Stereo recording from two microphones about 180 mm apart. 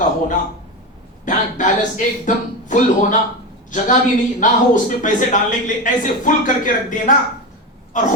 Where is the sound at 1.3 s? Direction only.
45° left (ahead or behind).